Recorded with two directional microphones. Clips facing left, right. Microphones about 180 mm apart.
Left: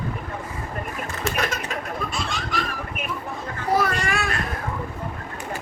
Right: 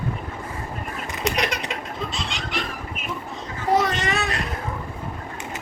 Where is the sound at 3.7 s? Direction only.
20° right (ahead or behind).